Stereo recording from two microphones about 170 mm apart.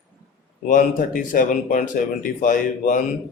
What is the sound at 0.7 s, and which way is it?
Speech, 50° left (ahead or behind).